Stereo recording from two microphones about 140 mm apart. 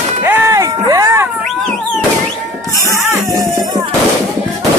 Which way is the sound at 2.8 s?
20° right (ahead or behind).